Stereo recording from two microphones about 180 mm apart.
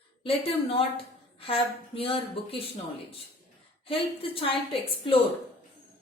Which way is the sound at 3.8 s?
30° left (ahead or behind).